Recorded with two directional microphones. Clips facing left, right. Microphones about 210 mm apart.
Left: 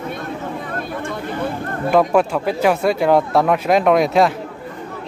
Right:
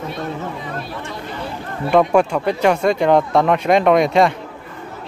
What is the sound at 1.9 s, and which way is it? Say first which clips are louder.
Speech: right 1 dB; centre (ahead or behind).